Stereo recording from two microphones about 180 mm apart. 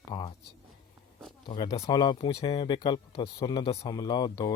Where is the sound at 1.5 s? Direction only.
20° left (ahead or behind).